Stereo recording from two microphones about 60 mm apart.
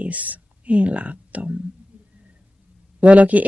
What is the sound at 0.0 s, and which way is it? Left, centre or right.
Speech, right.